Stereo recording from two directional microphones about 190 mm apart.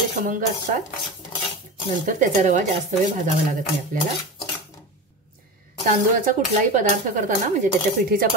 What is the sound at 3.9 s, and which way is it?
Speech, 45° right (ahead or behind).